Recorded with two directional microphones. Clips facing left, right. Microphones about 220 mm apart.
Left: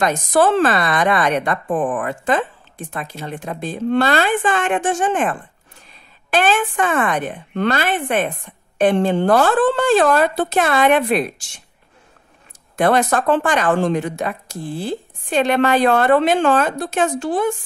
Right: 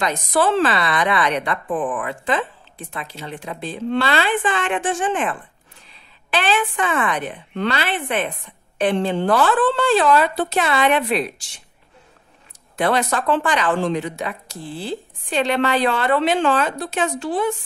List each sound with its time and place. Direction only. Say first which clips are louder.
0.0 s a woman's voice: left 4 dB; 45° left (ahead or behind)
12.7 s a woman's voice: left 4 dB; 50° left (ahead or behind)